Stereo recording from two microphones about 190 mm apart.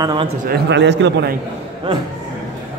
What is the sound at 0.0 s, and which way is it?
Speech, 25° right (ahead or behind).